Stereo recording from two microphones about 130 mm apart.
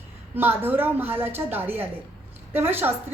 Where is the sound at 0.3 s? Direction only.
15° right (ahead or behind).